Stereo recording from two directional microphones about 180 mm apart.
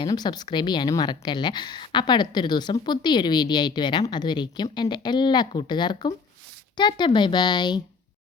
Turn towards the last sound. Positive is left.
turn(degrees=25)  # may be behind; listen again after turning